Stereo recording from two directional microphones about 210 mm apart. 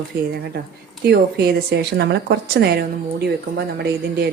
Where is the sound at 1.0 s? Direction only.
50° right (ahead or behind).